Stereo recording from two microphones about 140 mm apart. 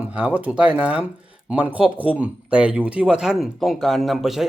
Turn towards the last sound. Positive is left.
turn(degrees=0)  # may be behind; listen again after turning